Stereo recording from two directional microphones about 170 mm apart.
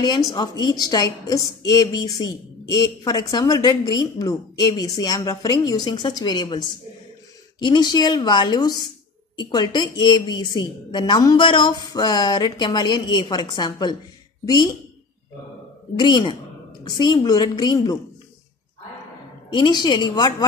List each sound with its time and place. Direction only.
0.0 s a woman's voice: 25° left (ahead or behind)
16.0 s a woman's voice: 25° left (ahead or behind)
19.5 s a woman's voice: 25° left (ahead or behind)